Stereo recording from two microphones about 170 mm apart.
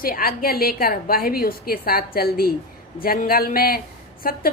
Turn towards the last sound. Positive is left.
turn(degrees=60)  # may be behind; listen again after turning